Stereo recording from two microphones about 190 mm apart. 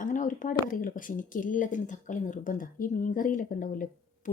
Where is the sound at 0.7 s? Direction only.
45° left (ahead or behind).